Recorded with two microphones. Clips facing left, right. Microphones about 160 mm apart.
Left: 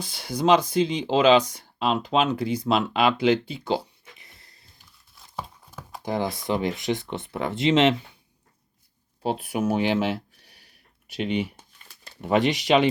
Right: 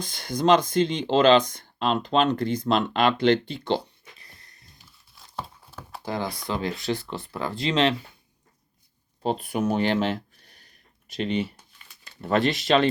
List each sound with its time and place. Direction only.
0.0 s speech: 5° left (ahead or behind)
4.2 s wheeze: 25° left (ahead or behind)
6.0 s speech: 20° left (ahead or behind)
9.2 s speech: 5° left (ahead or behind)